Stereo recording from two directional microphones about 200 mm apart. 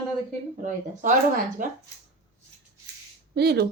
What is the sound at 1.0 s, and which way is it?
Speech, 40° right (ahead or behind).